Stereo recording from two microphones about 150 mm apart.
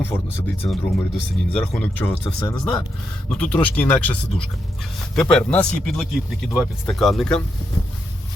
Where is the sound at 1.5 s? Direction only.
10° left (ahead or behind).